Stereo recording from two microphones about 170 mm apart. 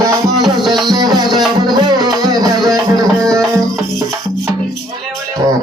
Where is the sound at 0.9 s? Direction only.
25° right (ahead or behind).